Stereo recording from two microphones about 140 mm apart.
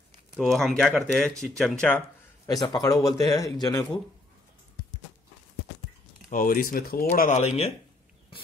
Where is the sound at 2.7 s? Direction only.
25° left (ahead or behind).